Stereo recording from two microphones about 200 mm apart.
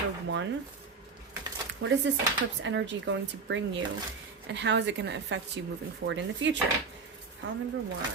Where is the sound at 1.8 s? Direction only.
55° right (ahead or behind).